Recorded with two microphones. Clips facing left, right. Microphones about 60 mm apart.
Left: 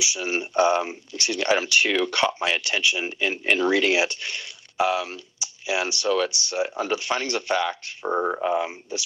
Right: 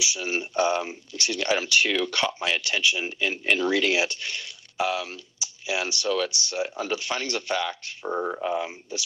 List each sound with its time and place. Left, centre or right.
0.0 s speech: left
8.0 s speech: left